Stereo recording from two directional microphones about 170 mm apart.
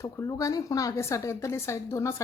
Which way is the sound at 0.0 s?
20° left (ahead or behind).